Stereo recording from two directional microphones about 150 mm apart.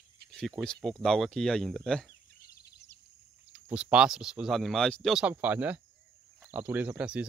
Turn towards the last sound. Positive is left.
turn(degrees=-5)  # may be behind; listen again after turning